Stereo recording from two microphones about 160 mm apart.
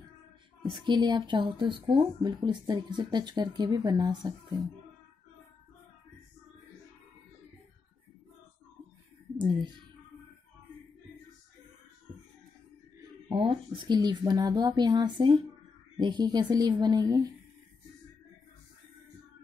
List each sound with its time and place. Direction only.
0.7 s speech: 25° right (ahead or behind)
13.3 s speech: 35° right (ahead or behind)